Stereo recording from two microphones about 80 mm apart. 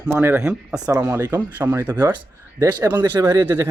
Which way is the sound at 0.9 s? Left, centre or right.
Right.